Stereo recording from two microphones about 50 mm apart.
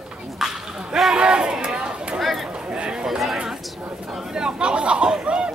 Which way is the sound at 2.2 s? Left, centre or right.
Centre.